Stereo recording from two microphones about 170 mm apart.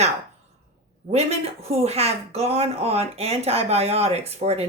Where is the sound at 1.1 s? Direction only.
40° right (ahead or behind).